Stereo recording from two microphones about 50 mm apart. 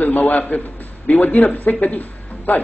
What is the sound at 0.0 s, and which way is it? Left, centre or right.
A man's voice, left.